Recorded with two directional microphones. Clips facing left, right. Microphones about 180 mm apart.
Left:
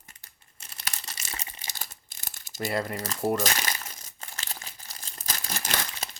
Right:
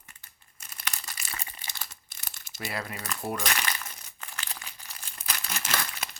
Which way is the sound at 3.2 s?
45° left (ahead or behind).